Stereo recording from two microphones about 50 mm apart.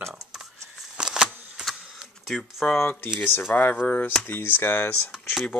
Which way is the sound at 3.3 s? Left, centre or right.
Left.